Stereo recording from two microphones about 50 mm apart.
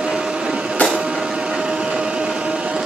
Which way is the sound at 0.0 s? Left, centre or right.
Centre.